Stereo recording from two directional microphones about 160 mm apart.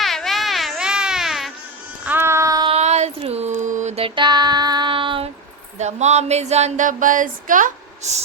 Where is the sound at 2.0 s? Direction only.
15° right (ahead or behind).